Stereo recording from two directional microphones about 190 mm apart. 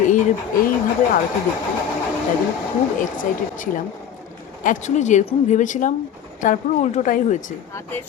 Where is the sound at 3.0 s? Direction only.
45° left (ahead or behind).